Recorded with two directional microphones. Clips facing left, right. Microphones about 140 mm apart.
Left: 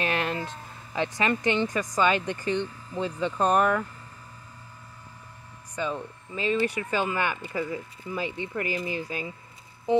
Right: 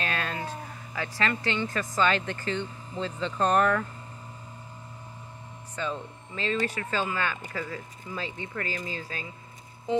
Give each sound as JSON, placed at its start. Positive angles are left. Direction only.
{"t": 0.0, "sound": "a sound", "side_deg": 20}
{"t": 0.5, "sound": "speech", "side_deg": 20}
{"t": 5.8, "sound": "speech", "side_deg": 15}